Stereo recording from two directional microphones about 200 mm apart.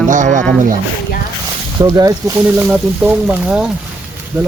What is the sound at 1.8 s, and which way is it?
Speech, 15° right (ahead or behind).